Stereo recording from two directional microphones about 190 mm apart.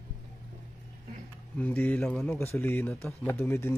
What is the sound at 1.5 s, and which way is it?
Speech, 10° left (ahead or behind).